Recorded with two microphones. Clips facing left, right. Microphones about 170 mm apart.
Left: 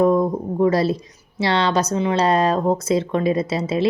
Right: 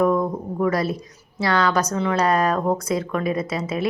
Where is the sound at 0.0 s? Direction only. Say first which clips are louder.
Left 3 dB; 25° left (ahead or behind).